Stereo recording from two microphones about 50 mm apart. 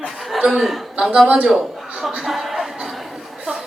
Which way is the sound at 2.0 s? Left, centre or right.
Centre.